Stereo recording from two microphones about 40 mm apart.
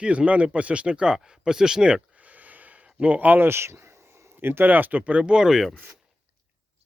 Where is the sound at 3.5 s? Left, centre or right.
Right.